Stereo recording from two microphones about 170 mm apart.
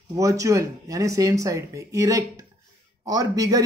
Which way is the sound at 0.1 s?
20° right (ahead or behind).